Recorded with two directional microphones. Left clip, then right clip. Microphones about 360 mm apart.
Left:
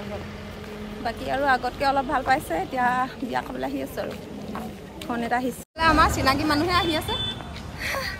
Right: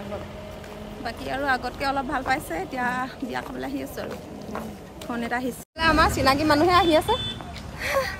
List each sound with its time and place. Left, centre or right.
1.0 s speech: centre
5.1 s a woman's voice: centre
7.8 s a sound: centre